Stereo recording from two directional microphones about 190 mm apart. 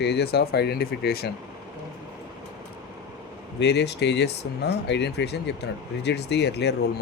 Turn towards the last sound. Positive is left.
turn(degrees=60)  # may be behind; listen again after turning